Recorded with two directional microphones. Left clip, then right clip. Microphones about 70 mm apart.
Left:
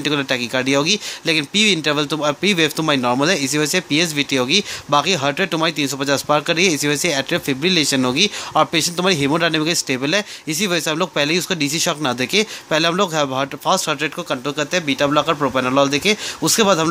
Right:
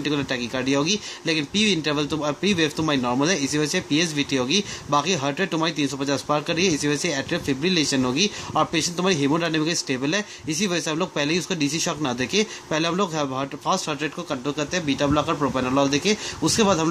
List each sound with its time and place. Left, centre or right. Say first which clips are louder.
0.0 s speech: left 6 dB; left